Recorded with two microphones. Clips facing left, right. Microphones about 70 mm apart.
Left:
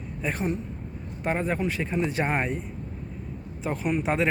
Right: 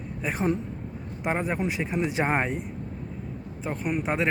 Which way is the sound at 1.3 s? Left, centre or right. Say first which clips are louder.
Left 1 dB; right.